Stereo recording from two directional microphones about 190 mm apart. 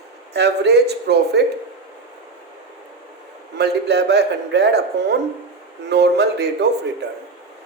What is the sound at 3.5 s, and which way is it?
Speech, 60° right (ahead or behind).